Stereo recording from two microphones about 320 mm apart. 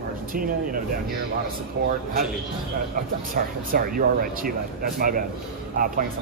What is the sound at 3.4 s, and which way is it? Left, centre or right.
Speech, right.